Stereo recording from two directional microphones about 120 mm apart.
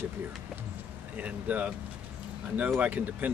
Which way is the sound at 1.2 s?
10° right (ahead or behind).